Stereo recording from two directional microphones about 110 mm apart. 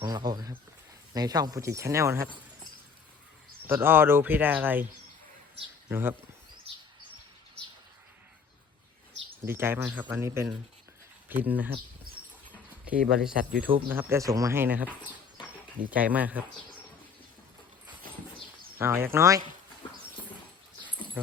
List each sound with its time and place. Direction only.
0.0 s speech: 40° right (ahead or behind)
3.7 s speech: 20° right (ahead or behind)
5.9 s speech: 20° right (ahead or behind)
9.5 s speech: 20° right (ahead or behind)
12.9 s speech: 5° right (ahead or behind)
13.8 s speech: 20° right (ahead or behind)
14.2 s speech: 30° right (ahead or behind)
15.9 s speech: 15° right (ahead or behind)
18.8 s speech: 20° right (ahead or behind)